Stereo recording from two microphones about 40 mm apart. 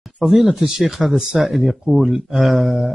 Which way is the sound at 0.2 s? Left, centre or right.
Centre.